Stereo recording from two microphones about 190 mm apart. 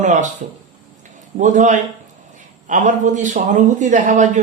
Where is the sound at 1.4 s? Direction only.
40° right (ahead or behind).